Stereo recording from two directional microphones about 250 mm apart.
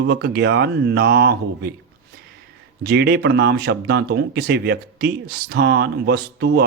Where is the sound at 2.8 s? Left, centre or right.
Right.